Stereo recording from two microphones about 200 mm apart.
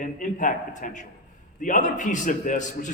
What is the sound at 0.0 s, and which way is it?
A man's voice, 40° left (ahead or behind).